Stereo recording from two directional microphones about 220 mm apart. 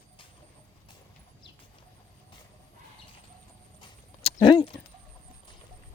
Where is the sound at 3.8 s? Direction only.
25° left (ahead or behind).